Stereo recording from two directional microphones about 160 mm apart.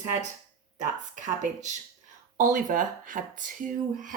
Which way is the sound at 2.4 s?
55° right (ahead or behind).